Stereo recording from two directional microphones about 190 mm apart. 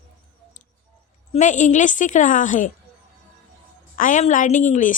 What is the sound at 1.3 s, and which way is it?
A woman's voice, 40° left (ahead or behind).